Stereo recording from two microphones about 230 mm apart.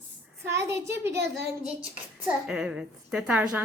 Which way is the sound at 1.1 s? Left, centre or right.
Right.